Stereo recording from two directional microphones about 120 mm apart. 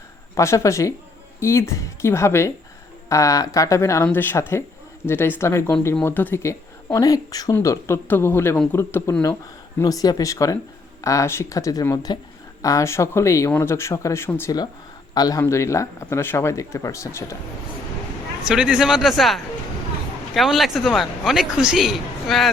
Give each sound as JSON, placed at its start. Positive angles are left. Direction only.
{"t": 0.3, "sound": "speech", "side_deg": 25}
{"t": 15.1, "sound": "speech", "side_deg": 30}
{"t": 18.4, "sound": "a man's voice", "side_deg": -5}